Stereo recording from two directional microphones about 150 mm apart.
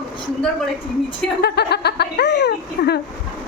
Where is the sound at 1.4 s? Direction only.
90° left.